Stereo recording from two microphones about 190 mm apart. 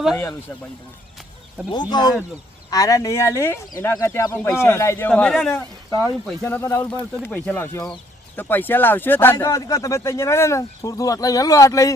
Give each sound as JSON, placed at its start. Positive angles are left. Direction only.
{"t": 1.7, "sound": "speech", "side_deg": 20}